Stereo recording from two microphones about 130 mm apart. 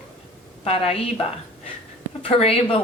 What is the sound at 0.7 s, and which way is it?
A woman's voice, 50° left (ahead or behind).